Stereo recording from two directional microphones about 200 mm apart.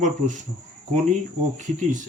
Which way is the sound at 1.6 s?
40° right (ahead or behind).